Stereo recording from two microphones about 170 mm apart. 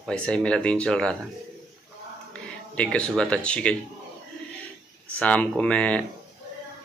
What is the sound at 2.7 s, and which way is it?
Speech, 5° left (ahead or behind).